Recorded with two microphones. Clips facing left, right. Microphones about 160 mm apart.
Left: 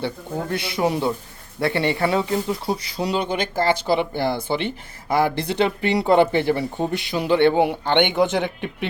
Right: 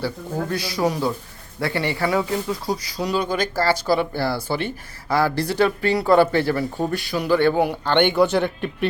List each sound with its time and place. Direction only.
0.5 s speech: 25° left (ahead or behind)